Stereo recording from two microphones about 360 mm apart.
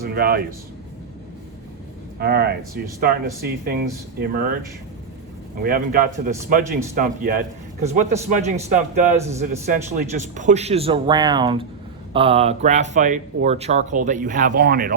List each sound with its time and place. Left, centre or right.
0.0 s a man's voice: right
2.1 s speech: right
5.6 s a man's voice: right